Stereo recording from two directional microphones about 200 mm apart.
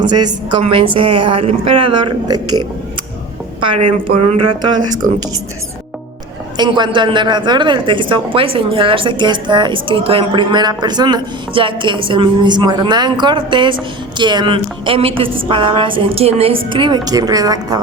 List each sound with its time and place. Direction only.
0.0 s a woman's voice: 20° right (ahead or behind)
3.8 s a woman's voice: 30° right (ahead or behind)
6.6 s a woman's voice: 20° right (ahead or behind)